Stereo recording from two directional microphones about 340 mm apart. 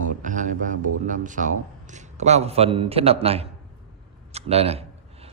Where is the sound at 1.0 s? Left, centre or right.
Right.